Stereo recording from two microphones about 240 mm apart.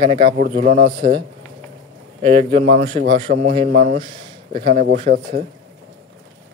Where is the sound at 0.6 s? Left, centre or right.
Right.